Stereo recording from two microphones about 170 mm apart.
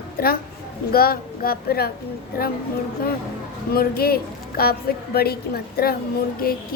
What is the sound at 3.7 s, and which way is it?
A woman's voice, 65° left (ahead or behind).